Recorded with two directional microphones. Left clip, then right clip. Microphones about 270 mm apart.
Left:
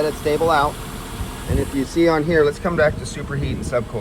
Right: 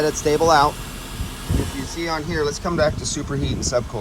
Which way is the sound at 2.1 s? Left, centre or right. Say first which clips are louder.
Left 6 dB; centre.